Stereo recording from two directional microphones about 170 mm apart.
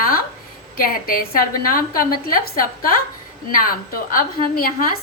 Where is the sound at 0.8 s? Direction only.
55° left (ahead or behind).